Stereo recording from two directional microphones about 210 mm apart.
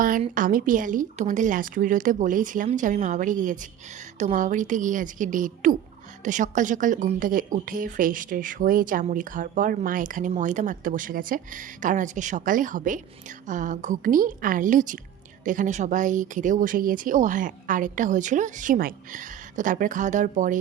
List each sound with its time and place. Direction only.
0.0 s speech: 40° right (ahead or behind)